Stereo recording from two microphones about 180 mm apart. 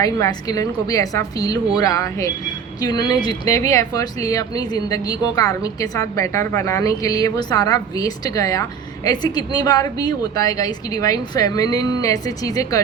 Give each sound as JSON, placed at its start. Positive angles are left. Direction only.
{"t": 0.0, "sound": "speech", "side_deg": 20}